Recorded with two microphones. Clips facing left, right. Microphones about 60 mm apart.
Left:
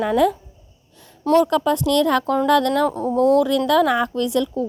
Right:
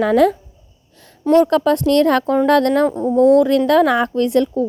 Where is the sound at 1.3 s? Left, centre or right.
Right.